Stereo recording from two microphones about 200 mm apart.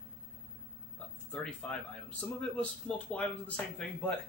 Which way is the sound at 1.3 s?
5° left (ahead or behind).